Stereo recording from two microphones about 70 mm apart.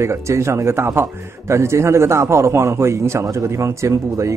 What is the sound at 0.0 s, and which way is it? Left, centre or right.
A man's voice, right.